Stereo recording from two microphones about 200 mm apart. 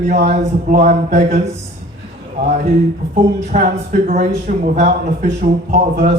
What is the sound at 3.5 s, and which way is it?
A man's voice, 40° right (ahead or behind).